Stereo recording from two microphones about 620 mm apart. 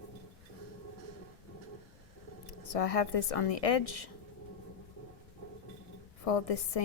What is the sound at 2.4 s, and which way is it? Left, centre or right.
A woman's voice, left.